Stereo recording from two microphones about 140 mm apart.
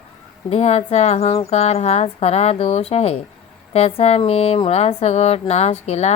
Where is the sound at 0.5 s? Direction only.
50° left (ahead or behind).